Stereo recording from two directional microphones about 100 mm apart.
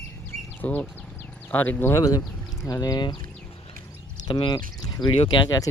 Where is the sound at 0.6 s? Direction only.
15° left (ahead or behind).